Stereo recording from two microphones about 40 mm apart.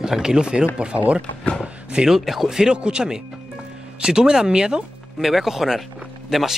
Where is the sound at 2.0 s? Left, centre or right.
Centre.